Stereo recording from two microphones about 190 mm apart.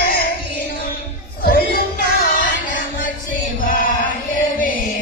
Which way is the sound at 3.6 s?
50° left (ahead or behind).